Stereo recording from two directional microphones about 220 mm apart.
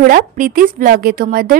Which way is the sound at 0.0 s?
40° right (ahead or behind).